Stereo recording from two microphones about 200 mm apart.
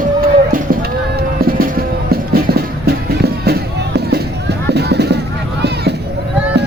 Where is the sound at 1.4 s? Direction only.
45° right (ahead or behind).